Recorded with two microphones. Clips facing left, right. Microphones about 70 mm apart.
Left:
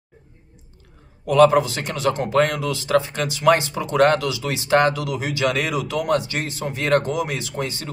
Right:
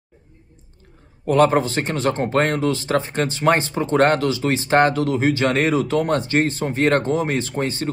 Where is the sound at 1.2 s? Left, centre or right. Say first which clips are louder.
Left 2 dB; right.